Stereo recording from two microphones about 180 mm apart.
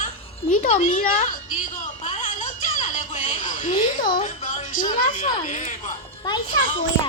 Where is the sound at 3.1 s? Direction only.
40° left (ahead or behind).